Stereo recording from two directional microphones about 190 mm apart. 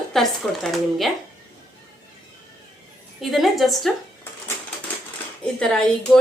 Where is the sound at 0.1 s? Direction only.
Centre (ahead or behind).